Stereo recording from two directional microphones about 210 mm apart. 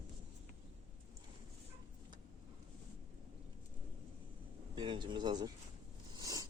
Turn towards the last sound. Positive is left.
turn(degrees=-15)  # may be behind; listen again after turning